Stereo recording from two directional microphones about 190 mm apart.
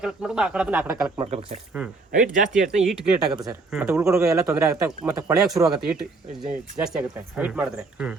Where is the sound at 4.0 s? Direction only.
15° right (ahead or behind).